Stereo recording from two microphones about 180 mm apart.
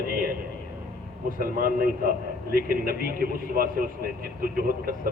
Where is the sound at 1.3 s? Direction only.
50° right (ahead or behind).